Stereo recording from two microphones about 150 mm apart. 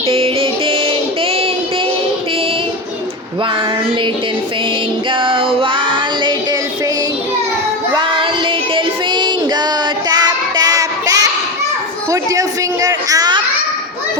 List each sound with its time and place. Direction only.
0.1 s music: 40° right (ahead or behind)
5.2 s female singing: 35° right (ahead or behind)
7.9 s child singing: 35° right (ahead or behind)
12.1 s a sound: 20° right (ahead or behind)